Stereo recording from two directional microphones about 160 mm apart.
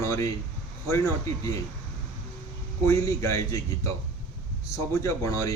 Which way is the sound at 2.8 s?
20° left (ahead or behind).